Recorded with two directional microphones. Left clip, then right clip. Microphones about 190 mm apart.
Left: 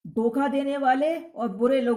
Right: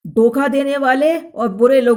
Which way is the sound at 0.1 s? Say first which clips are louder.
Right 11 dB; 45° right (ahead or behind).